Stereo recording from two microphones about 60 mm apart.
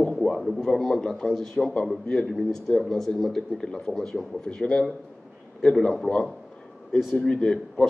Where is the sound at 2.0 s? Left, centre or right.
Centre.